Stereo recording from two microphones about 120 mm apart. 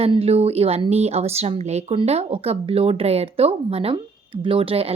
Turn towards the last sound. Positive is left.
turn(degrees=-50)  # may be behind; listen again after turning